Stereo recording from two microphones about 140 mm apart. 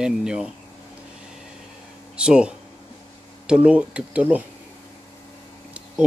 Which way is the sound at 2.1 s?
5° right (ahead or behind).